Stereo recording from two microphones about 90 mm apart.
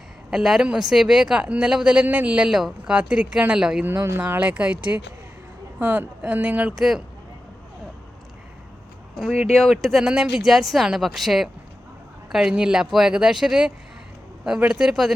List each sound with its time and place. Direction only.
0.3 s speech: 5° right (ahead or behind)
3.8 s speech: 25° right (ahead or behind)
6.7 s speech: 5° right (ahead or behind)
9.1 s speech: centre (ahead or behind)